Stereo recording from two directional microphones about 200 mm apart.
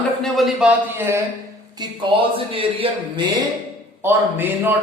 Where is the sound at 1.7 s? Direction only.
20° right (ahead or behind).